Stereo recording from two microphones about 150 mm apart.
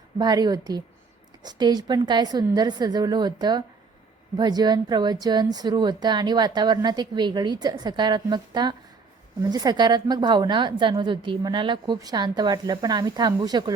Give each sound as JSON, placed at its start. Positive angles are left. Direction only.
{"t": 0.2, "sound": "a woman's voice", "side_deg": -30}